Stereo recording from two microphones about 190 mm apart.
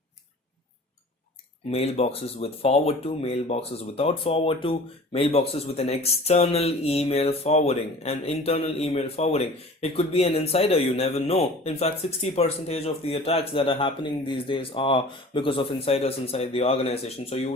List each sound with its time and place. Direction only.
1.7 s speech: 30° left (ahead or behind)